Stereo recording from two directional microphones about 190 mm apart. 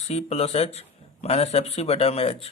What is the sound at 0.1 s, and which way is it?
Speech, 35° left (ahead or behind).